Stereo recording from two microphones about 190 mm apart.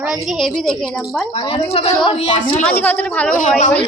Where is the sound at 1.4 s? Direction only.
30° left (ahead or behind).